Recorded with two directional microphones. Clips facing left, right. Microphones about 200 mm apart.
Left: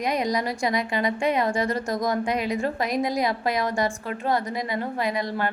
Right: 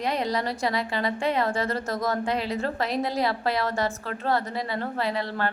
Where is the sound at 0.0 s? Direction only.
15° left (ahead or behind).